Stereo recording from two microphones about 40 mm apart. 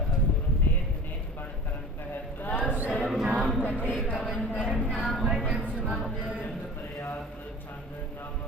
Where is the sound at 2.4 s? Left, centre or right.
Left.